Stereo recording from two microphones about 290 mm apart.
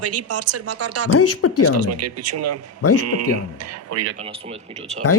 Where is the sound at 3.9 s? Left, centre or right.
Right.